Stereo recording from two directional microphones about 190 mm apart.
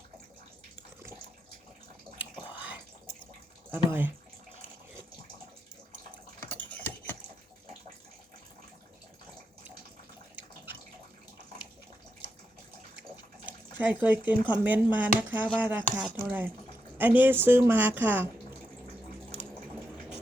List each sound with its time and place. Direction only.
2.5 s drip: 10° right (ahead or behind)
3.7 s speech: 10° right (ahead or behind)
6.6 s typing: 10° left (ahead or behind)
13.0 s speech: 10° right (ahead or behind)